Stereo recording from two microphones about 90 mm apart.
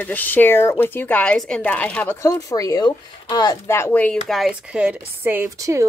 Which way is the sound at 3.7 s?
30° left (ahead or behind).